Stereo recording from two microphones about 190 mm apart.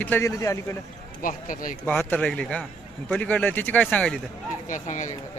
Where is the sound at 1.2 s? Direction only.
45° left (ahead or behind).